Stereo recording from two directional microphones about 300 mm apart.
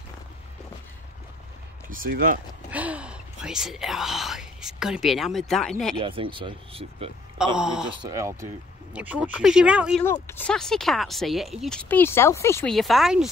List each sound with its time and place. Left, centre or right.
1.9 s speech: right
2.7 s speech: centre
5.9 s speech: centre
7.5 s speech: centre
10.0 s speech: centre